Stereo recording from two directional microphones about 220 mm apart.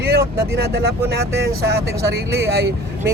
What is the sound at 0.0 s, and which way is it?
Speech, 50° right (ahead or behind).